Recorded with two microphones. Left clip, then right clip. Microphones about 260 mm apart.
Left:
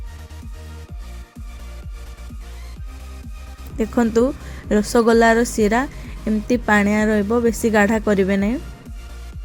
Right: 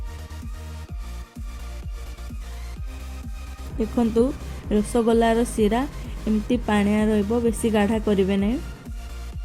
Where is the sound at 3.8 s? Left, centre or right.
Centre.